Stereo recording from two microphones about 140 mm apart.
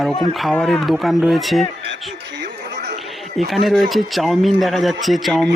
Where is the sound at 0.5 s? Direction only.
5° left (ahead or behind).